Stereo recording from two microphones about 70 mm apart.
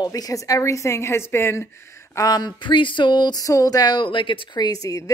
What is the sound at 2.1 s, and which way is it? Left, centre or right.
Speech, left.